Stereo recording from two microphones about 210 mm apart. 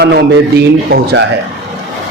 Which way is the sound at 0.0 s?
50° right (ahead or behind).